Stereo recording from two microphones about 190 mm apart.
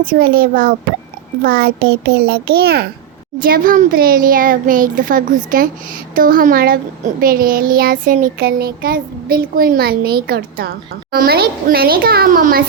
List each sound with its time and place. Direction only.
0.0 s child singing: 50° right (ahead or behind)
1.5 s a child's voice: 55° right (ahead or behind)
3.3 s child singing: 45° right (ahead or behind)